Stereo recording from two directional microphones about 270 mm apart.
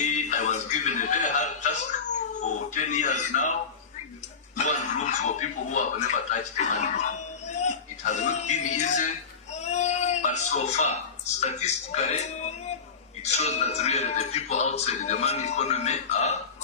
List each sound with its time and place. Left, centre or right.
0.0 s chuckle: left
2.1 s cat: left
4.5 s speech: left